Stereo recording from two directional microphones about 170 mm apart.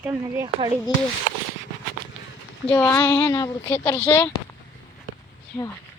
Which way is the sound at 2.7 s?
15° left (ahead or behind).